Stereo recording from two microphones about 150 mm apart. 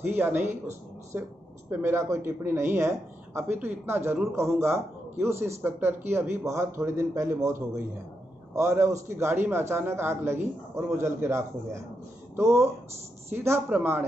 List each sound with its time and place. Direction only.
0.0 s a man's voice: 15° right (ahead or behind)